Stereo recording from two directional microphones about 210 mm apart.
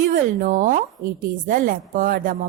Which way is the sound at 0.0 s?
40° right (ahead or behind).